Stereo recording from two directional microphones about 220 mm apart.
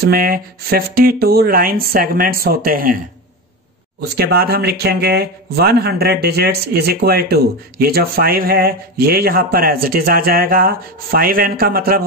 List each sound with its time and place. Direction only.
0.0 s speech: 40° right (ahead or behind)
4.2 s speech: 45° right (ahead or behind)